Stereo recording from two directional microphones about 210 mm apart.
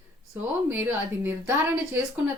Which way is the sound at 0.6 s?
10° right (ahead or behind).